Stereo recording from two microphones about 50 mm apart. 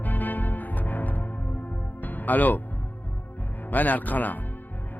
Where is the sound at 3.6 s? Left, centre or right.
Left.